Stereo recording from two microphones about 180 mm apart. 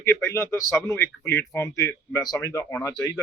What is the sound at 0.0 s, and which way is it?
A man's voice, 15° left (ahead or behind).